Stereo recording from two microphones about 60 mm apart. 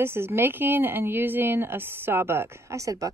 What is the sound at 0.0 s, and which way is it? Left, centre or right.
A woman's voice, right.